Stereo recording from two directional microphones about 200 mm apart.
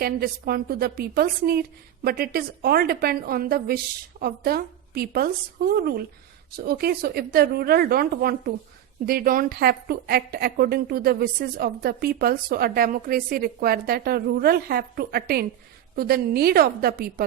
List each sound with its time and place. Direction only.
0.0 s a woman's voice: 50° right (ahead or behind)